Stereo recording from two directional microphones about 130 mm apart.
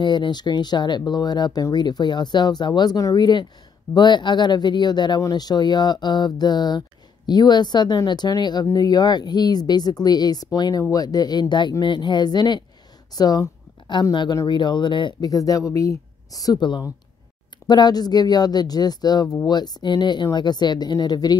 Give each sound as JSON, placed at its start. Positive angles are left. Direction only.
{"t": 0.0, "sound": "speech", "side_deg": 35}
{"t": 13.1, "sound": "a sound", "side_deg": 30}
{"t": 14.1, "sound": "speech", "side_deg": 30}